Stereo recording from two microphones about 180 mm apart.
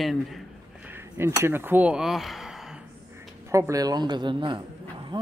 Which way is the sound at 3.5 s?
15° right (ahead or behind).